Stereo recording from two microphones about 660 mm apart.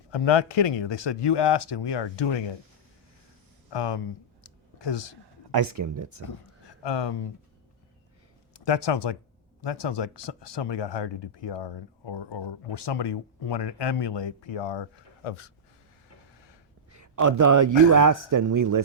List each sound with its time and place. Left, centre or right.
0.1 s speech: left
3.7 s speech: left
4.4 s a sound: left
5.5 s a man's voice: right
6.8 s speech: left
8.5 s speech: left
16.9 s a man's voice: right